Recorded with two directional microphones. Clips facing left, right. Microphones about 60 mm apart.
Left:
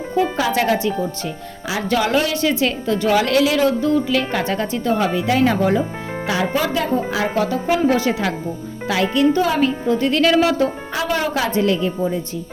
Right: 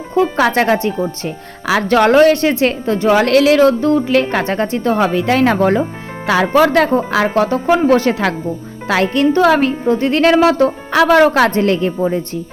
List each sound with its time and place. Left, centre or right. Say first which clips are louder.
0.5 s speech: right 4 dB; right
1.6 s speech: right 8 dB; right
3.2 s speech: right 6 dB; right
7.3 s speech: right 5 dB; right
10.9 s speech: right 15 dB; right